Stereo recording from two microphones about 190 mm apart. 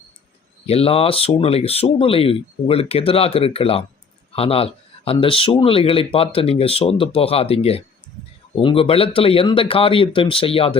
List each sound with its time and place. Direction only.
0.7 s speech: 30° left (ahead or behind)